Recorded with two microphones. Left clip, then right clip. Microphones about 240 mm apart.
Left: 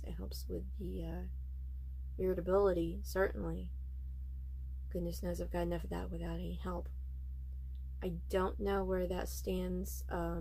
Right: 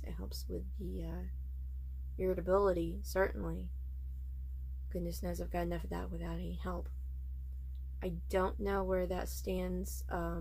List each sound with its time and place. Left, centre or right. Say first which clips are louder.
0.0 s speech: right 1 dB; centre
4.9 s speech: left 1 dB; centre
8.0 s speech: right 1 dB; centre